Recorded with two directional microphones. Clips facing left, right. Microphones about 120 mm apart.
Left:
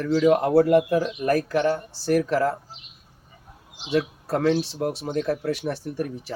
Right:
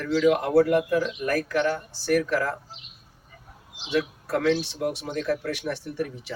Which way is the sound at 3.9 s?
30° left (ahead or behind).